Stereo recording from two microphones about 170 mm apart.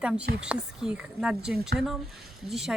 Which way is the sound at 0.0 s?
5° right (ahead or behind).